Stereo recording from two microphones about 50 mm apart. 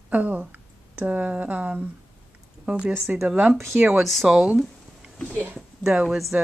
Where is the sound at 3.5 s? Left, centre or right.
Right.